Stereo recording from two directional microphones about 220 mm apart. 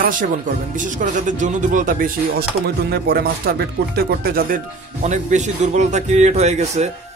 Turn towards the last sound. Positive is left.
turn(degrees=-30)  # may be behind; listen again after turning